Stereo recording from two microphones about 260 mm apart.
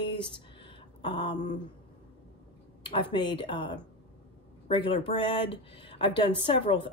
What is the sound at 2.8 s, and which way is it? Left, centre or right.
Speech, centre.